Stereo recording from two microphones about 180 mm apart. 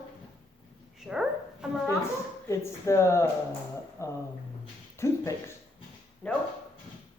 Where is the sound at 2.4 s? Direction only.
15° left (ahead or behind).